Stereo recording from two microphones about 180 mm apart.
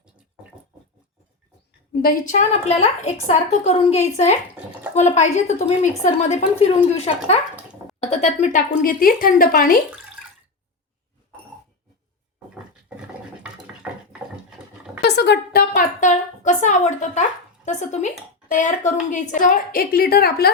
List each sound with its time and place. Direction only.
1.9 s a woman's voice: 55° left (ahead or behind)
13.8 s water: 5° right (ahead or behind)
15.0 s a sound: 70° left (ahead or behind); by 18.1 s 40° left (ahead or behind)
18.6 s a woman's voice: 40° left (ahead or behind)